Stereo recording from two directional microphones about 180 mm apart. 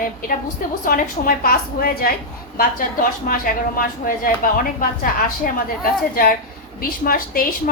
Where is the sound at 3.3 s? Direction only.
50° left (ahead or behind).